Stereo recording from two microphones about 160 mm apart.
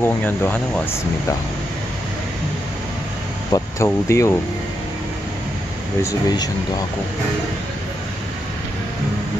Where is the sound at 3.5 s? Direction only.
20° left (ahead or behind).